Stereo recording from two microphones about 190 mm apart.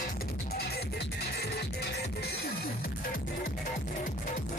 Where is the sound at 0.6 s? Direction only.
55° left (ahead or behind).